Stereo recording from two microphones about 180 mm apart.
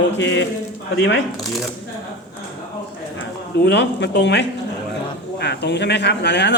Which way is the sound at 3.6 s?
75° left (ahead or behind).